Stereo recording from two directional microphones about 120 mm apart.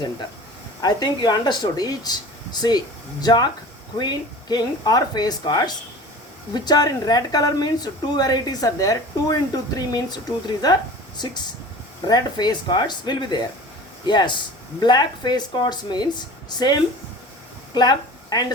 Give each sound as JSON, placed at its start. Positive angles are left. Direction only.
{"t": 0.8, "sound": "speech", "side_deg": 35}